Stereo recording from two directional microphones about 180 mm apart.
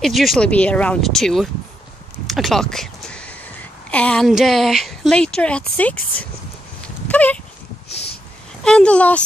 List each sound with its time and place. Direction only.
0.0 s speech: centre (ahead or behind)
2.2 s a sound: centre (ahead or behind)
3.9 s speech: 5° left (ahead or behind)
7.1 s horse: 10° left (ahead or behind)
8.6 s speech: 5° left (ahead or behind)